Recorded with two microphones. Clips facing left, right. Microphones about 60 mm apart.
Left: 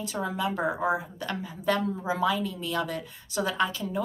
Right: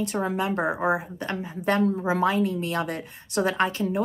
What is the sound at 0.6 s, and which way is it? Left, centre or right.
A woman's voice, centre.